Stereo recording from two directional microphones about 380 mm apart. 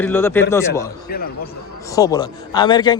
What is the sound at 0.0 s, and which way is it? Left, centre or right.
Speech, centre.